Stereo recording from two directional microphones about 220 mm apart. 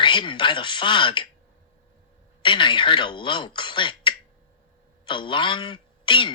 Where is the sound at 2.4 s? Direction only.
20° left (ahead or behind).